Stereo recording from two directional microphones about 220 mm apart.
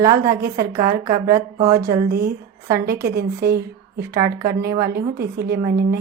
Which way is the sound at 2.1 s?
45° right (ahead or behind).